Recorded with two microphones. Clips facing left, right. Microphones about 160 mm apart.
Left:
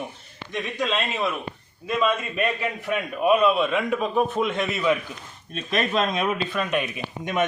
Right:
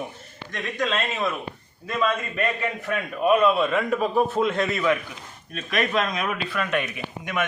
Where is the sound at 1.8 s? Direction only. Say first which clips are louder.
Left 1 dB; 15° left (ahead or behind).